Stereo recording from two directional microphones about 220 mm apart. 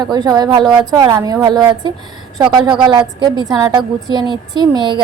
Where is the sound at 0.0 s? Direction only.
20° right (ahead or behind).